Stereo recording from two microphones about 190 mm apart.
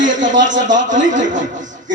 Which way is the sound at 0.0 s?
40° right (ahead or behind).